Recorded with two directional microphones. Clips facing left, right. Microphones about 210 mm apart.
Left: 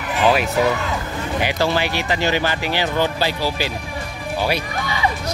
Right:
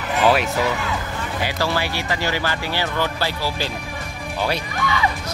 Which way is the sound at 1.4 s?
20° left (ahead or behind).